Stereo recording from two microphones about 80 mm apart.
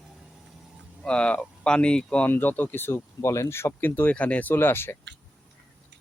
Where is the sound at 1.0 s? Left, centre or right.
Centre.